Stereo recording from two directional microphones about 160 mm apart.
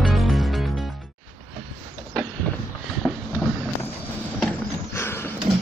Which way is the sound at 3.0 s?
15° left (ahead or behind).